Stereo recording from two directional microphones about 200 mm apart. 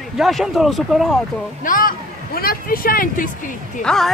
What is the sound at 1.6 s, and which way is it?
Speech, 45° left (ahead or behind).